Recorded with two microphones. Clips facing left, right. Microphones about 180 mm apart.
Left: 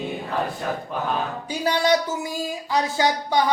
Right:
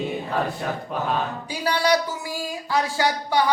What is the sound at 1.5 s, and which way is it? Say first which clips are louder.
Speech: left 1 dB; 20° left (ahead or behind).